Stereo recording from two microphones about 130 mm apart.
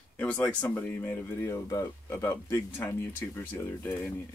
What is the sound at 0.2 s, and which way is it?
Speech, 10° left (ahead or behind).